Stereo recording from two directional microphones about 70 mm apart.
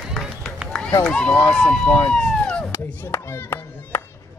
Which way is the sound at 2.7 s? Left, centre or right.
Left.